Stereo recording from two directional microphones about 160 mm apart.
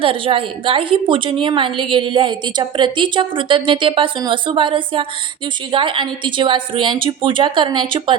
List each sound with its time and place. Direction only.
0.0 s a woman's voice: 35° right (ahead or behind)